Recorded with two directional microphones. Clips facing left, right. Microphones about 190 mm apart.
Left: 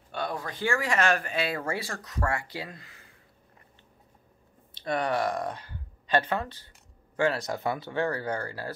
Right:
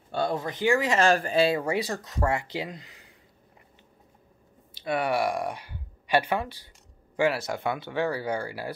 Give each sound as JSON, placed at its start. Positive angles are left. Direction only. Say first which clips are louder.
{"t": 0.1, "sound": "speech", "louder": "right 5 dB", "side_deg": -25}
{"t": 1.6, "sound": "speech", "louder": "right 5 dB", "side_deg": -20}
{"t": 4.7, "sound": "speech", "louder": "right 2 dB", "side_deg": -10}